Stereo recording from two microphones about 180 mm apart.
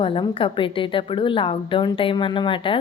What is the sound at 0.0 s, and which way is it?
A woman's voice, 30° left (ahead or behind).